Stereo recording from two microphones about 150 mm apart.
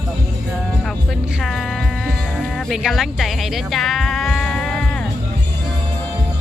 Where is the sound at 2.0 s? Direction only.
Centre (ahead or behind).